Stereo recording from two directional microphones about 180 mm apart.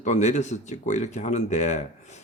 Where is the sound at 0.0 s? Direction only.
40° left (ahead or behind).